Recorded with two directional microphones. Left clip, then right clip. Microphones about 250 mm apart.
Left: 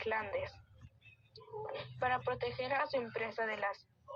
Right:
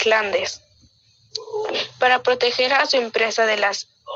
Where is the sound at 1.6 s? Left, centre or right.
Right.